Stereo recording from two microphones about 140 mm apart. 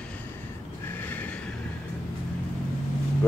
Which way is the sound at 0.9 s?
15° left (ahead or behind).